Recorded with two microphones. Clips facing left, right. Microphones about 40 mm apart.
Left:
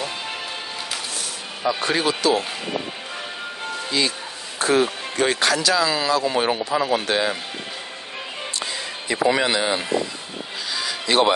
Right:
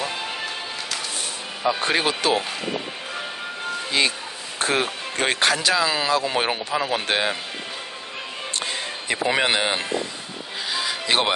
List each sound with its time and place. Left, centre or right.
1.7 s speech: right
4.0 s speech: right
6.7 s speech: centre
7.1 s speech: right
8.5 s a sound: right
9.3 s speech: right
10.7 s music: right